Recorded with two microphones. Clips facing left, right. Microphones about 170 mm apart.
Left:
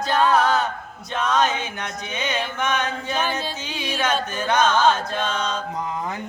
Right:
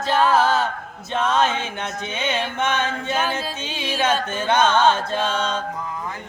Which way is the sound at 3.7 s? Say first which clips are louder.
Right 2 dB; 25° right (ahead or behind).